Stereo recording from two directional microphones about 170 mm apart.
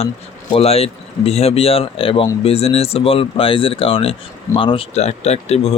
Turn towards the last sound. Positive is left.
turn(degrees=35)  # may be behind; listen again after turning